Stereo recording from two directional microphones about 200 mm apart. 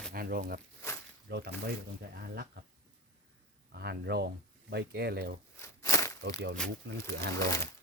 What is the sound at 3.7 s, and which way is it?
Speech, 55° right (ahead or behind).